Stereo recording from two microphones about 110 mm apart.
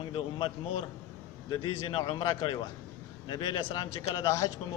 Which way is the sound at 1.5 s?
45° left (ahead or behind).